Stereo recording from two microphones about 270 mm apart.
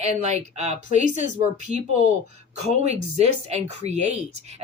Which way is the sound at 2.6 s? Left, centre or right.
Right.